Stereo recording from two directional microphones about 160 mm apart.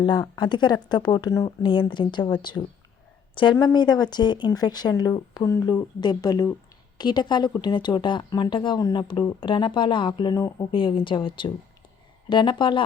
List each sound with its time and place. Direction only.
0.0 s speech: 30° left (ahead or behind)